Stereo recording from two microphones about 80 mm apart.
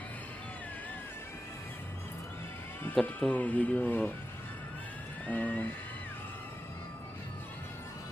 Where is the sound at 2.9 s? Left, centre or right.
Centre.